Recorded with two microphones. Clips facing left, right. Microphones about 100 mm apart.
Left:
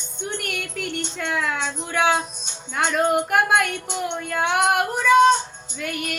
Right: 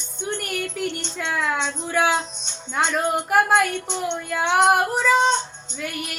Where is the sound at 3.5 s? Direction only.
10° left (ahead or behind).